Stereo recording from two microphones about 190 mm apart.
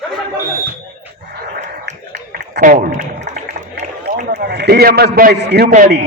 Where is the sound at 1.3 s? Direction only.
55° right (ahead or behind); by 3.6 s 40° right (ahead or behind).